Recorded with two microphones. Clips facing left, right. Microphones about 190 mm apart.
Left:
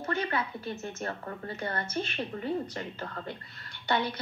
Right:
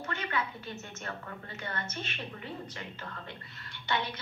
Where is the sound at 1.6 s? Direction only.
35° left (ahead or behind).